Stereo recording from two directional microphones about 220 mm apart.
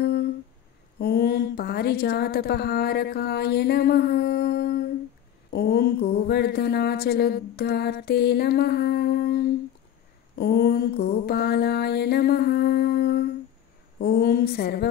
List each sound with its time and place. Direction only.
0.0 s humming: 45° left (ahead or behind)
0.9 s speech: 45° left (ahead or behind)
10.3 s mantra: 45° left (ahead or behind)
13.9 s speech: 45° left (ahead or behind)